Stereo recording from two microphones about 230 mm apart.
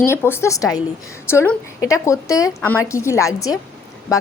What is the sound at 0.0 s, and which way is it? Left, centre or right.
A woman's voice, centre.